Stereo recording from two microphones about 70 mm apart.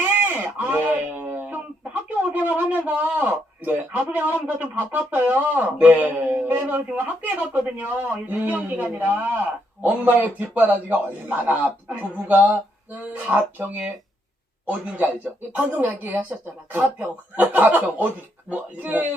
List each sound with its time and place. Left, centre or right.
0.0 s guitar: right
1.9 s a man's voice: right